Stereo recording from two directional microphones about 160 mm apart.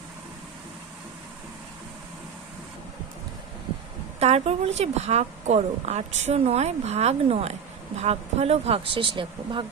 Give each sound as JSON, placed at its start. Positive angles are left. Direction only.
{"t": 4.2, "sound": "a woman's voice", "side_deg": -40}